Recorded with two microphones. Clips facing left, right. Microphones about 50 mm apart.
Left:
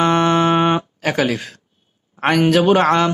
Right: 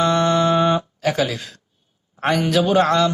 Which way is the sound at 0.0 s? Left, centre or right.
Left.